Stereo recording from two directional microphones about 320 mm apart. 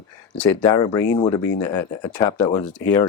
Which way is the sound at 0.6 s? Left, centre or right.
Centre.